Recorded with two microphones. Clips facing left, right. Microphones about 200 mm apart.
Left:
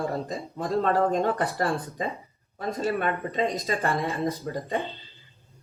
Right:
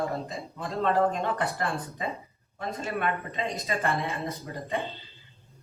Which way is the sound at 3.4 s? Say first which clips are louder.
Left 6 dB; 35° left (ahead or behind).